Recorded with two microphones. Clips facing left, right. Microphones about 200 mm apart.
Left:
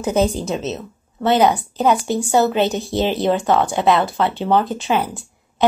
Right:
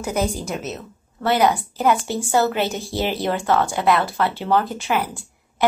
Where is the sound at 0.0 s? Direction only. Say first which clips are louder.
Left 5 dB; 20° left (ahead or behind).